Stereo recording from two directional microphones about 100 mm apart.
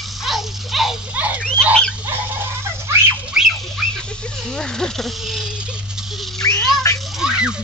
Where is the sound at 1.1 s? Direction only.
15° right (ahead or behind).